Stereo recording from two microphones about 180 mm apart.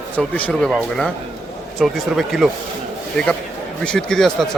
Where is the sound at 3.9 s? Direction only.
5° left (ahead or behind).